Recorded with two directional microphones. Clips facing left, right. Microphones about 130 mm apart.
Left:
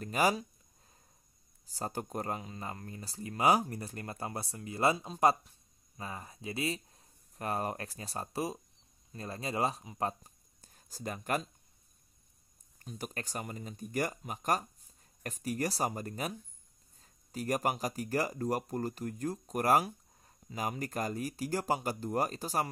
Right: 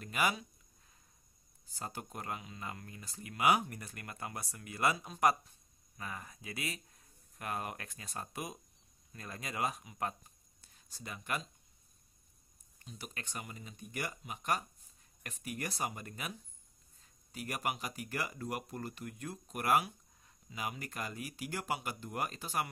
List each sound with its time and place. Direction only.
0.0 s speech: 35° left (ahead or behind)
1.7 s speech: 40° left (ahead or behind)
12.7 s speech: 45° left (ahead or behind)